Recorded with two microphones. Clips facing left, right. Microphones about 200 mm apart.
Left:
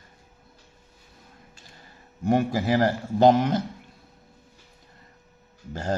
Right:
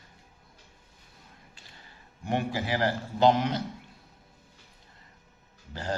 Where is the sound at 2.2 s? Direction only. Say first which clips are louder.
Left 7 dB; 40° left (ahead or behind).